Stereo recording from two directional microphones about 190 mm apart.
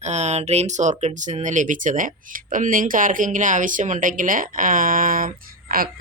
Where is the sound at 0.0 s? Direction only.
35° right (ahead or behind).